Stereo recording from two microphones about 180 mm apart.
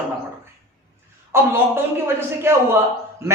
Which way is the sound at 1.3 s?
15° right (ahead or behind).